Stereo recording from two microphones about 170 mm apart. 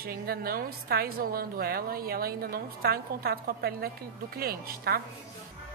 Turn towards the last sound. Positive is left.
turn(degrees=-65)  # may be behind; listen again after turning